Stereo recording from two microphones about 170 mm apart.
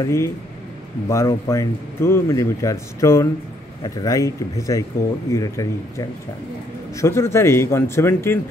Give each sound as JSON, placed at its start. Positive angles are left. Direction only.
{"t": 0.0, "sound": "speech", "side_deg": 15}